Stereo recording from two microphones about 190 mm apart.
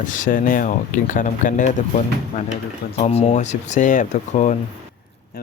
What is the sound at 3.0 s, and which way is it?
Speech, 35° left (ahead or behind).